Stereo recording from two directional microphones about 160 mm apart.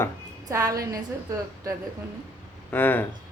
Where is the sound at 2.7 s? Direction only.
10° left (ahead or behind).